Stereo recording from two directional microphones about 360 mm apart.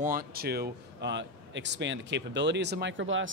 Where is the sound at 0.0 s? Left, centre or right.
Right.